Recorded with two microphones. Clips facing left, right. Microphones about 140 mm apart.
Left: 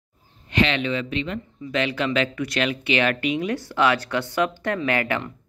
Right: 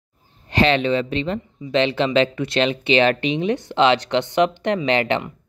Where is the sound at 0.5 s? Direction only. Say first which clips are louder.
Right 5 dB; 35° right (ahead or behind).